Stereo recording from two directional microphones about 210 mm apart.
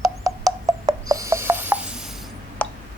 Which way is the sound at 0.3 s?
15° right (ahead or behind).